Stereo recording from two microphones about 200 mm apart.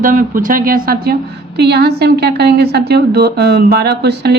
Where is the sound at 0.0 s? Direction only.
40° right (ahead or behind).